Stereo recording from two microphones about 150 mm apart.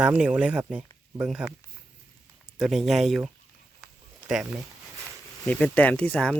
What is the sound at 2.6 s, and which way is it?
Speech, centre (ahead or behind).